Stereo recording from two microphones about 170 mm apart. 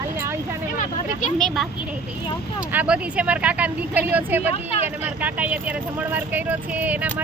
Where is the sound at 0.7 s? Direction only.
50° left (ahead or behind).